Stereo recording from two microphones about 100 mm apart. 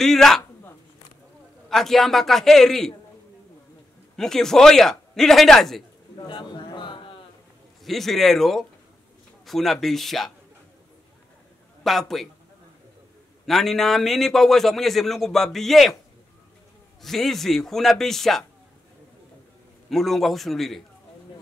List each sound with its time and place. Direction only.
0.0 s a man's voice: 5° left (ahead or behind)
1.7 s a man's voice: 5° left (ahead or behind)
4.2 s a man's voice: 5° left (ahead or behind)
6.1 s a sound: 50° left (ahead or behind)
7.8 s a man's voice: centre (ahead or behind)
11.8 s a man's voice: centre (ahead or behind)
13.5 s a man's voice: centre (ahead or behind)
17.0 s a man's voice: 5° left (ahead or behind)
19.9 s a man's voice: centre (ahead or behind)